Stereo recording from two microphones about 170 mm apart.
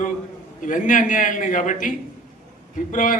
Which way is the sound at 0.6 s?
50° left (ahead or behind).